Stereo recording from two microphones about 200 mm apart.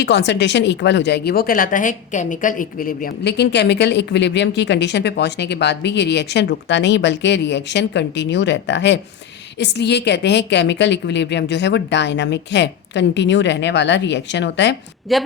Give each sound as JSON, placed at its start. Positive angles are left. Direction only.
{"t": 0.0, "sound": "speech", "side_deg": 60}
{"t": 15.1, "sound": "a woman's voice", "side_deg": 0}